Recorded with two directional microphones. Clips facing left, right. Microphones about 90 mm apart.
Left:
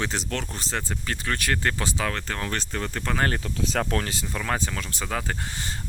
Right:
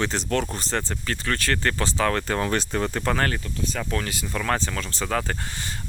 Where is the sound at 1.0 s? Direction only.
15° left (ahead or behind).